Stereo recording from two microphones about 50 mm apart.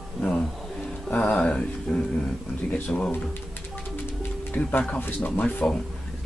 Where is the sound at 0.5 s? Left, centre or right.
Centre.